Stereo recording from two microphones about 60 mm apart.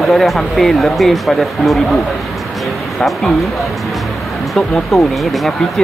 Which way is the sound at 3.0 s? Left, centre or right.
Centre.